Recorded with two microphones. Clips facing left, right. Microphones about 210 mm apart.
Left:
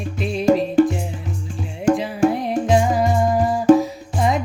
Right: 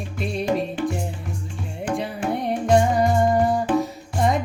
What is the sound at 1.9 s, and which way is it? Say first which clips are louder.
Music: left 9 dB; 45° left (ahead or behind).